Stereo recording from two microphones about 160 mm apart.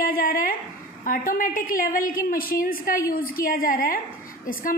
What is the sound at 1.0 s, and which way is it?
A woman's voice, 60° left (ahead or behind).